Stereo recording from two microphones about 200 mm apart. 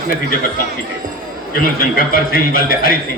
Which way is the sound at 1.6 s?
45° left (ahead or behind).